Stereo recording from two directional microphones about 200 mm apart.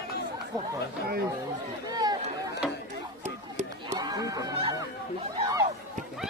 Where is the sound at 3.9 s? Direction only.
20° right (ahead or behind).